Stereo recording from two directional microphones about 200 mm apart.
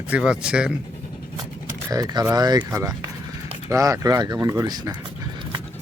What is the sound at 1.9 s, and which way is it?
Speech, 20° right (ahead or behind).